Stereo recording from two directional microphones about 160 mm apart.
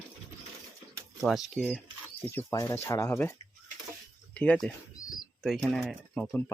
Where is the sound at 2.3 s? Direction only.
15° left (ahead or behind).